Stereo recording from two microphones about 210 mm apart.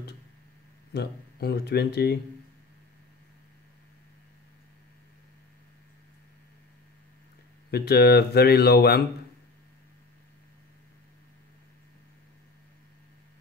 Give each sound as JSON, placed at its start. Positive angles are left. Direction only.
{"t": 0.9, "sound": "speech", "side_deg": 50}
{"t": 7.7, "sound": "speech", "side_deg": 50}